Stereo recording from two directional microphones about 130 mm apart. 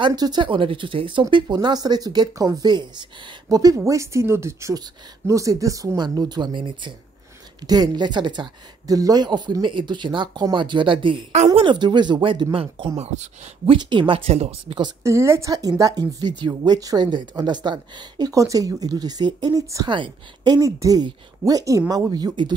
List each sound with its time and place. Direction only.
0.0 s speech: 30° right (ahead or behind)
11.3 s speech: 50° right (ahead or behind)
11.6 s speech: 35° right (ahead or behind); by 13.3 s 60° right (ahead or behind)
13.7 s speech: 35° right (ahead or behind)
15.0 s speech: 20° right (ahead or behind)